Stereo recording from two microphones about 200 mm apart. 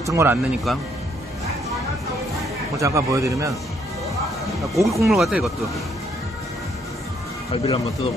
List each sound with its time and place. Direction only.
0.0 s a man's voice: 15° right (ahead or behind)
2.8 s a man's voice: 15° right (ahead or behind)
4.7 s a man's voice: 15° right (ahead or behind)
5.0 s speech: centre (ahead or behind)
7.5 s speech: 25° left (ahead or behind)